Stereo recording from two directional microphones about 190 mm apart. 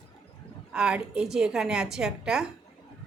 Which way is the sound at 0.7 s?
5° right (ahead or behind).